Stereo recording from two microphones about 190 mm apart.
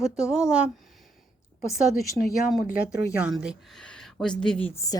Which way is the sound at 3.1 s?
5° right (ahead or behind).